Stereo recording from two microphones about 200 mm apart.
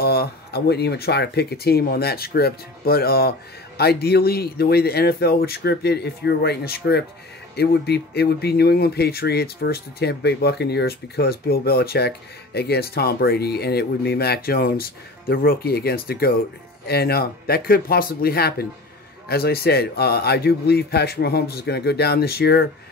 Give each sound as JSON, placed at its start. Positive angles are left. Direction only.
{"t": 0.0, "sound": "speech", "side_deg": 50}